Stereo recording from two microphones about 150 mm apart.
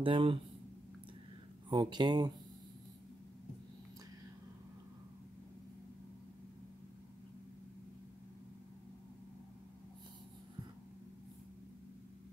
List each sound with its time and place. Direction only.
0.0 s speech: 35° right (ahead or behind)
1.7 s speech: 30° right (ahead or behind)